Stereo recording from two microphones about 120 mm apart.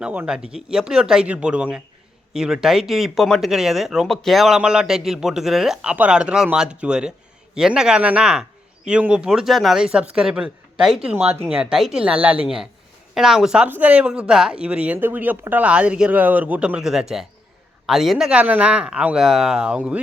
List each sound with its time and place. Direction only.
0.0 s speech: 10° right (ahead or behind)
11.1 s speech: 15° right (ahead or behind)